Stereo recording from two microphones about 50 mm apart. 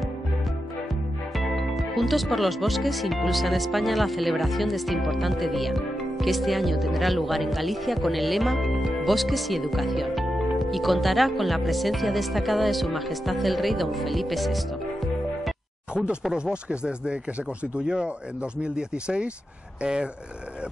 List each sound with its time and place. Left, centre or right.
1.3 s speech: centre
16.3 s speech: centre